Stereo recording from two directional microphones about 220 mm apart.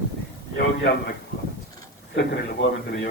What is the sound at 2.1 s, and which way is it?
Speech, 55° left (ahead or behind).